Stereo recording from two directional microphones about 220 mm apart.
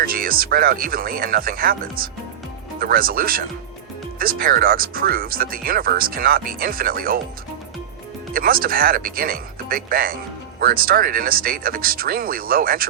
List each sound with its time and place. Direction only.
0.0 s speech: 40° right (ahead or behind)
8.3 s speech: 40° right (ahead or behind)